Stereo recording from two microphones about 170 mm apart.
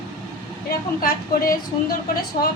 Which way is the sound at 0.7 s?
60° left (ahead or behind).